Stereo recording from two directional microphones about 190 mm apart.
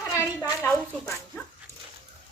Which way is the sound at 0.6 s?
10° left (ahead or behind).